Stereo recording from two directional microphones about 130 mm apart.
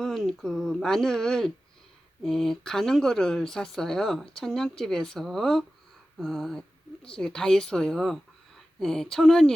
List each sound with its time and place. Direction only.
0.0 s speech: centre (ahead or behind)